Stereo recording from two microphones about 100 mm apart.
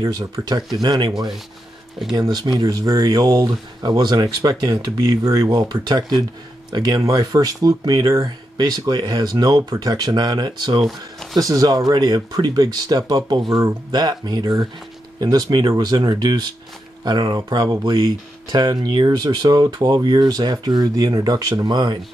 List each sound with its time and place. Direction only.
0.0 s speech: 40° right (ahead or behind)
2.1 s speech: 45° right (ahead or behind)